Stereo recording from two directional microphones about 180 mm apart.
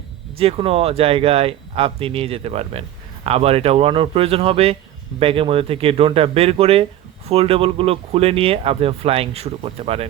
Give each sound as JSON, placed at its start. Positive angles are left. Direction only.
{"t": 0.3, "sound": "speech", "side_deg": -30}